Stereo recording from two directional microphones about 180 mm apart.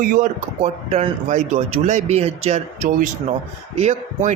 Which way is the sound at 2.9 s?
50° right (ahead or behind).